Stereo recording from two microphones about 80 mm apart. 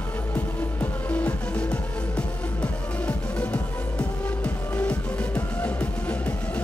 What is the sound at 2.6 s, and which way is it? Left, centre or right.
Music, centre.